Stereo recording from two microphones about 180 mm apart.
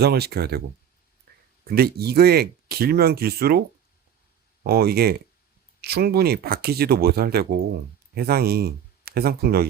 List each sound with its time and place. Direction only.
0.0 s speech: 60° right (ahead or behind)
1.6 s speech: 60° right (ahead or behind)
4.6 s speech: 60° right (ahead or behind)